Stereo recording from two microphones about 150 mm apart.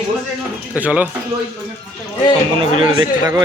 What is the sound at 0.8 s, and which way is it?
Speech, 10° right (ahead or behind).